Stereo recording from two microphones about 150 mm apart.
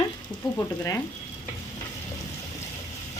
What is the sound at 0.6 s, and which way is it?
Speech, 20° left (ahead or behind).